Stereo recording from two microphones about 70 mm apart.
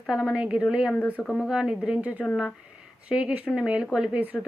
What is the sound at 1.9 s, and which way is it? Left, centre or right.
A woman's voice, right.